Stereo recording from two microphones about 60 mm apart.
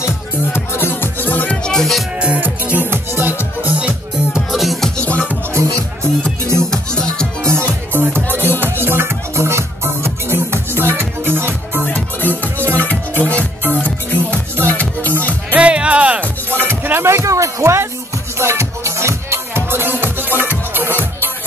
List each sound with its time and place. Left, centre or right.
0.0 s music: left
1.2 s music: left
1.6 s music: centre
2.1 s music: right
3.8 s music: centre
5.5 s music: right
6.6 s music: centre
7.4 s music: right
8.0 s music: right
11.8 s music: left
15.5 s music: centre
16.8 s music: right